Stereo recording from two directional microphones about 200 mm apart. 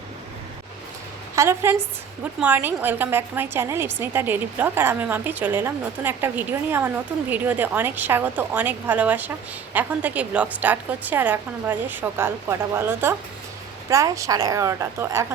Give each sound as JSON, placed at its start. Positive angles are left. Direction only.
{"t": 1.4, "sound": "a woman's voice", "side_deg": -10}